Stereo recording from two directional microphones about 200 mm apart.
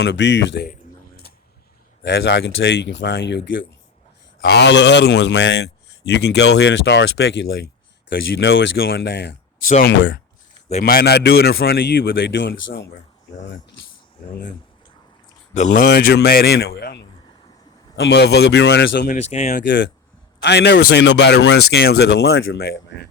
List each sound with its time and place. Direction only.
0.0 s a man's voice: 60° left (ahead or behind)
2.0 s a man's voice: 60° left (ahead or behind)
10.8 s a man's voice: 50° left (ahead or behind)
15.5 s speech: 35° left (ahead or behind)
15.8 s a man's voice: 55° left (ahead or behind)
19.0 s speech: 35° left (ahead or behind)
19.6 s a man's voice: 65° left (ahead or behind)